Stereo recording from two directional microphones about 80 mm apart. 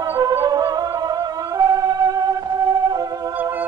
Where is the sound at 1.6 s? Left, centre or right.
Right.